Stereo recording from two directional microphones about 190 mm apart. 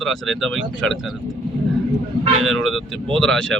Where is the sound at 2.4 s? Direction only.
Centre (ahead or behind).